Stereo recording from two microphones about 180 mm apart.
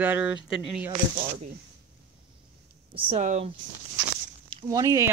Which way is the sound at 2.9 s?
30° right (ahead or behind).